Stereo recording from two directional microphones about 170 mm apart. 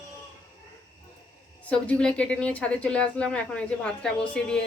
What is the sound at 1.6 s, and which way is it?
A woman's voice, 5° left (ahead or behind).